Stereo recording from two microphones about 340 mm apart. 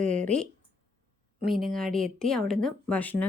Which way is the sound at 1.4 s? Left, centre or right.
Right.